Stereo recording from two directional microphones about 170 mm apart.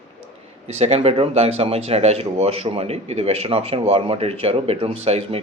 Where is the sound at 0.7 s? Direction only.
35° right (ahead or behind).